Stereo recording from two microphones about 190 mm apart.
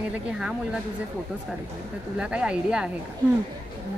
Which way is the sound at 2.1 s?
5° right (ahead or behind).